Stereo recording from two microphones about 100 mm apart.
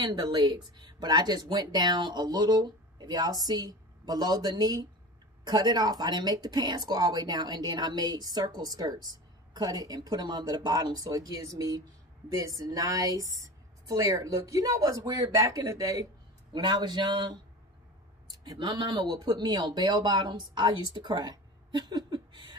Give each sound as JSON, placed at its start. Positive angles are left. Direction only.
{"t": 0.0, "sound": "speech", "side_deg": -45}
{"t": 16.5, "sound": "speech", "side_deg": -50}
{"t": 18.6, "sound": "speech", "side_deg": -55}